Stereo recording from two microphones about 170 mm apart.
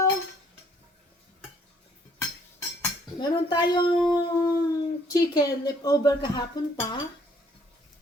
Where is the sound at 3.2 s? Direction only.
25° left (ahead or behind).